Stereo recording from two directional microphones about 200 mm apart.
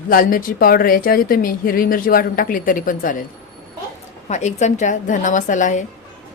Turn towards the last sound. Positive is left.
turn(degrees=40)  # may be behind; listen again after turning